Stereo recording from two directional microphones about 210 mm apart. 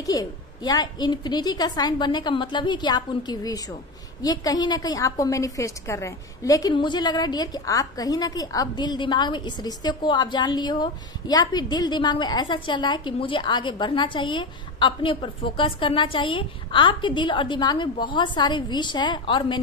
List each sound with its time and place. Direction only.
0.0 s a woman's voice: 15° left (ahead or behind)